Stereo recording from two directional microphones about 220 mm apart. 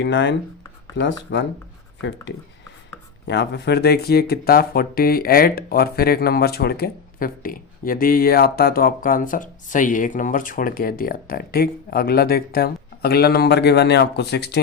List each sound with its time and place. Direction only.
0.0 s speech: 55° left (ahead or behind)